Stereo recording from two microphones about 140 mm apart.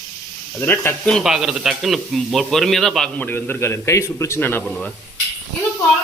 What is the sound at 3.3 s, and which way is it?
A man's voice, 15° left (ahead or behind).